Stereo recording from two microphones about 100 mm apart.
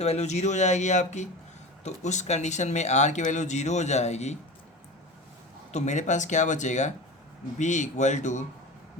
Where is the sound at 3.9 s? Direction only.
90° left.